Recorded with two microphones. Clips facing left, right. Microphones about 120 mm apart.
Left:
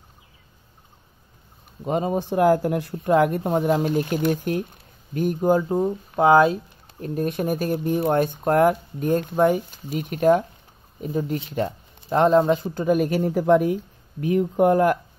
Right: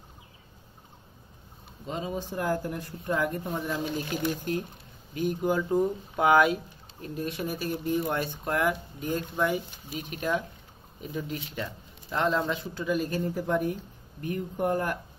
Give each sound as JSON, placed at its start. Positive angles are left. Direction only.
{"t": 1.9, "sound": "speech", "side_deg": 55}
{"t": 5.1, "sound": "speech", "side_deg": 45}
{"t": 7.0, "sound": "speech", "side_deg": 50}
{"t": 11.0, "sound": "speech", "side_deg": 40}